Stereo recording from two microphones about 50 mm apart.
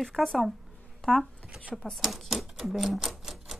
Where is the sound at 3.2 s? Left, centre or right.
Centre.